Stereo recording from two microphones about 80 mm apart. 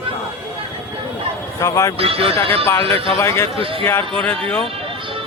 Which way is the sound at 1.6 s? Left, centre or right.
Left.